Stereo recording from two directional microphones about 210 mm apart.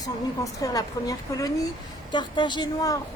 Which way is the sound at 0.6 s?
15° left (ahead or behind).